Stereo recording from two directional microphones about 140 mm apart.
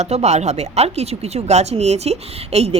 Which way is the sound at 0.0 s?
55° right (ahead or behind).